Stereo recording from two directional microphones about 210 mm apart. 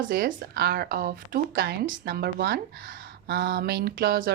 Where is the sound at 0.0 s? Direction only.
45° right (ahead or behind).